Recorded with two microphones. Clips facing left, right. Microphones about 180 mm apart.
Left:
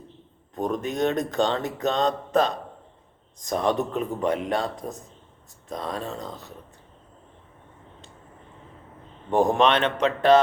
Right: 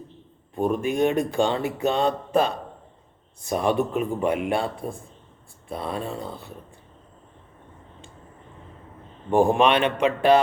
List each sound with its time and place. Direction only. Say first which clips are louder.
0.5 s speech: right 4 dB; 10° right (ahead or behind)
9.3 s speech: right 2 dB; 10° right (ahead or behind)